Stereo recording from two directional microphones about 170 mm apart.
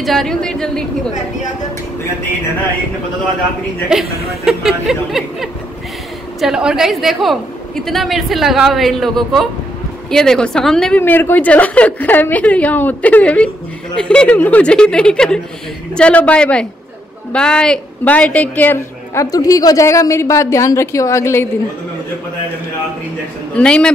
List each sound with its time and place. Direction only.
0.0 s a woman's voice: centre (ahead or behind)
3.9 s a woman's voice: centre (ahead or behind); by 21.5 s 15° left (ahead or behind)
23.5 s a woman's voice: 5° left (ahead or behind)